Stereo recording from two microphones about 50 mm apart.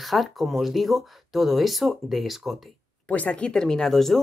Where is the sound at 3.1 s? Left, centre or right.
Left.